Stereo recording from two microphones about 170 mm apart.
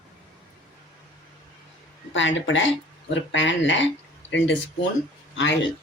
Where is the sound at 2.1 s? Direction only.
90° left.